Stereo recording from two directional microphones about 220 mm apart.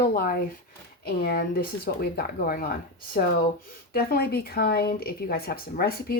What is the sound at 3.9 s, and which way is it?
A woman's voice, 45° left (ahead or behind).